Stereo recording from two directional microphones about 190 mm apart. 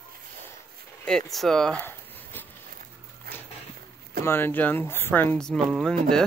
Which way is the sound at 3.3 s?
55° right (ahead or behind).